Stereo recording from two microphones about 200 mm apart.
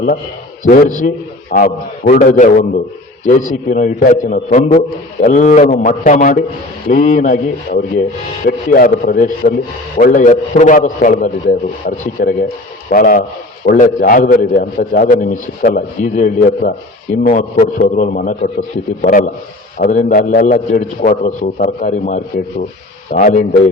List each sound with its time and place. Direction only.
0.6 s a man's voice: 40° left (ahead or behind)